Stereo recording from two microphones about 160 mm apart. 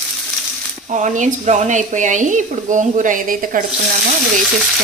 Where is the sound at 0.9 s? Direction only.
50° right (ahead or behind).